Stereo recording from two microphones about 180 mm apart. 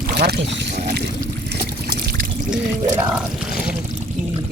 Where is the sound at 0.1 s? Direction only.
65° right (ahead or behind).